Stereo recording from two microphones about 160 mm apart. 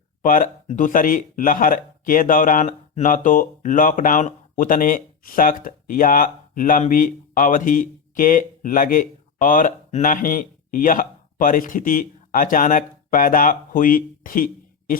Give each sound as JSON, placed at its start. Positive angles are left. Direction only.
{"t": 0.2, "sound": "speech", "side_deg": 55}